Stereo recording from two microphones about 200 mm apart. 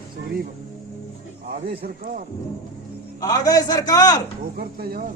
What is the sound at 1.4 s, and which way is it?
Speech, 50° right (ahead or behind).